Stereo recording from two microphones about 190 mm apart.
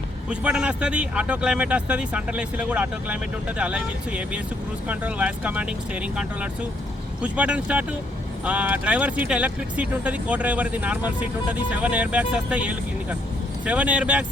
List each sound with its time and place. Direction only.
0.3 s speech: 5° right (ahead or behind)